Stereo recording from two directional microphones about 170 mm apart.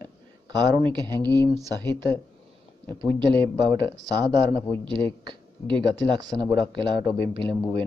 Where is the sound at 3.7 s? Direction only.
25° right (ahead or behind).